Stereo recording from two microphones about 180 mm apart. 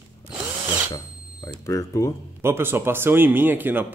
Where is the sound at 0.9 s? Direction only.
20° left (ahead or behind).